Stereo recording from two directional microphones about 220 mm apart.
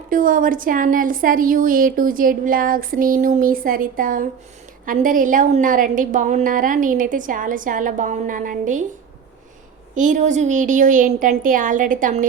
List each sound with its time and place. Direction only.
0.1 s a woman's voice: 40° right (ahead or behind)
9.9 s a woman's voice: 35° right (ahead or behind)